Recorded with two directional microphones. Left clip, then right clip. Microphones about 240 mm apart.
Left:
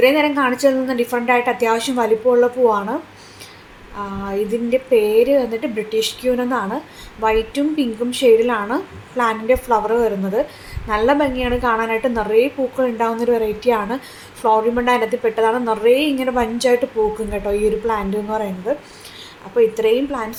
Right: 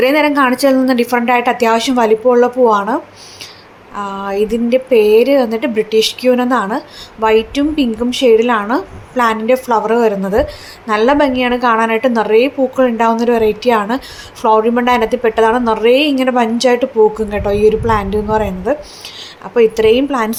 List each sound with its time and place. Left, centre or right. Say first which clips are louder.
0.0 s a woman's voice: right 4 dB; right